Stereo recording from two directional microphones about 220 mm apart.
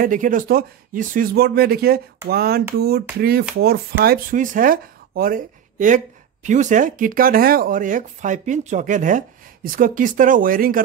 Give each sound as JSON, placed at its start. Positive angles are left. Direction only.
{"t": 0.0, "sound": "speech", "side_deg": -35}